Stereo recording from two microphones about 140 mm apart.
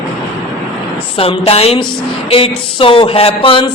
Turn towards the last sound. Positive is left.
turn(degrees=40)  # may be behind; listen again after turning